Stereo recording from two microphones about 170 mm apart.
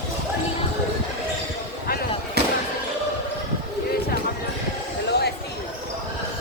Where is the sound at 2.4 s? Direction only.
70° right (ahead or behind).